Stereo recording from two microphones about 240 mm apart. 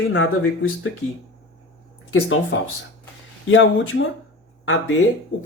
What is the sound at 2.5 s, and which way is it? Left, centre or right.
Speech, left.